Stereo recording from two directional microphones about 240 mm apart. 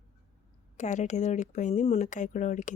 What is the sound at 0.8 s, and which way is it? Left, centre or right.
Speech, left.